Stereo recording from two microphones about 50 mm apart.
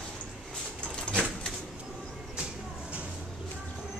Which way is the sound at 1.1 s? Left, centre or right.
Left.